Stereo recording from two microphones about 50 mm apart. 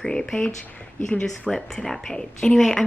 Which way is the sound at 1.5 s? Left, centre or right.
Centre.